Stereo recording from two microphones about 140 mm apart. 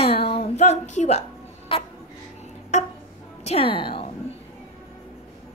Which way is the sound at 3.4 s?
45° left (ahead or behind).